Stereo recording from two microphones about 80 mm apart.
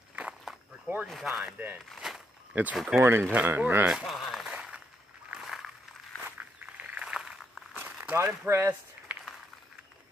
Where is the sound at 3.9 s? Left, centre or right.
Centre.